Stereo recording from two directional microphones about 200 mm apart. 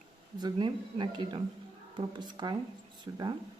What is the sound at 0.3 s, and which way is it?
Speech, 20° right (ahead or behind).